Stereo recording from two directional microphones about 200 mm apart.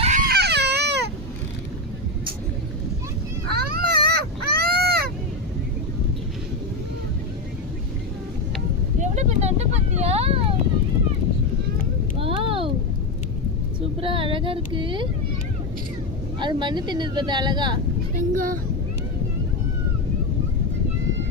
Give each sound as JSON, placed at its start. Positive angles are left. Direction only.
{"t": 0.0, "sound": "baby cry", "side_deg": -40}
{"t": 3.5, "sound": "baby cry", "side_deg": -50}
{"t": 9.0, "sound": "a sound", "side_deg": -35}
{"t": 12.1, "sound": "a sound", "side_deg": -25}
{"t": 14.0, "sound": "female singing", "side_deg": -25}
{"t": 16.4, "sound": "speech", "side_deg": -20}
{"t": 18.2, "sound": "speech", "side_deg": -45}